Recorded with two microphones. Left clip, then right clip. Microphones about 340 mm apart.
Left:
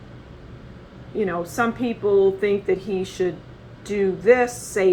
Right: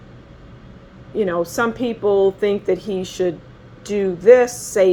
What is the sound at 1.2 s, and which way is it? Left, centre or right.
Speech, right.